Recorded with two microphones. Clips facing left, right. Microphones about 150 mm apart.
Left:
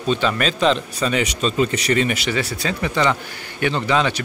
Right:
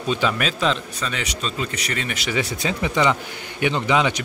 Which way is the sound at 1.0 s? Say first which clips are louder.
Left 8 dB; 15° left (ahead or behind).